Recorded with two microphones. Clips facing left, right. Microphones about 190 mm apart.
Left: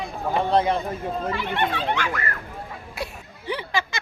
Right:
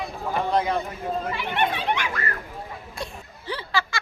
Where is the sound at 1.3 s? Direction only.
20° right (ahead or behind).